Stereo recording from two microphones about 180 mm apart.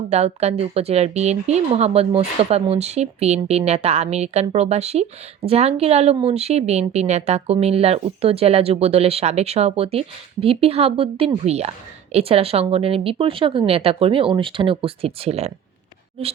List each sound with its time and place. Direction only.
0.1 s speech: 35° right (ahead or behind)